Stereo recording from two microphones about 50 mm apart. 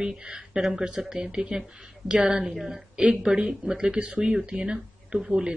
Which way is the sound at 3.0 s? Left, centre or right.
Centre.